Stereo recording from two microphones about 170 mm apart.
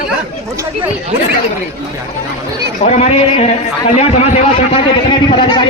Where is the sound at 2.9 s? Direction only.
35° left (ahead or behind).